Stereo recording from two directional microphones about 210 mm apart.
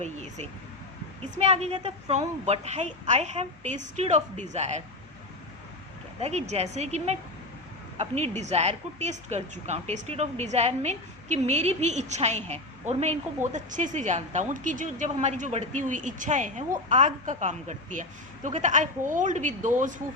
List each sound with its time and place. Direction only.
0.0 s a woman's voice: 30° right (ahead or behind)
6.1 s a woman's voice: 30° right (ahead or behind)